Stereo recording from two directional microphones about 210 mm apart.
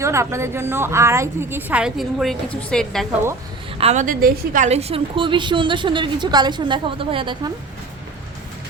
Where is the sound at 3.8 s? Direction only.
30° right (ahead or behind).